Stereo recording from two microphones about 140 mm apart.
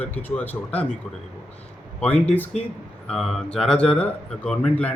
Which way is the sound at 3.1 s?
5° left (ahead or behind).